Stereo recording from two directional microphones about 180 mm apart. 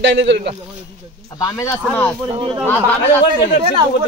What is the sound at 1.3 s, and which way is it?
Speech, 20° left (ahead or behind).